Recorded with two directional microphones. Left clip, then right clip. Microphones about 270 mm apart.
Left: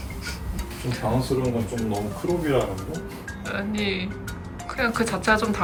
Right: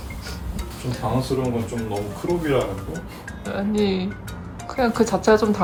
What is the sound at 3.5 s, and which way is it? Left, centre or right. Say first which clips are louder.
Speech: right 4 dB; centre.